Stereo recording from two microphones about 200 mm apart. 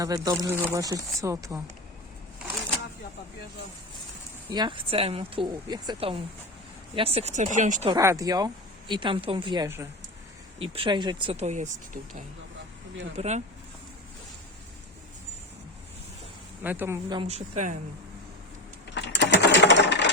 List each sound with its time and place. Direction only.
0.0 s speech: 20° right (ahead or behind)
4.5 s speech: 25° right (ahead or behind)
7.9 s speech: 15° right (ahead or behind)
10.6 s speech: 25° right (ahead or behind)
16.6 s speech: 10° right (ahead or behind)
17.2 s speech: 30° right (ahead or behind)
18.9 s typing: 60° left (ahead or behind)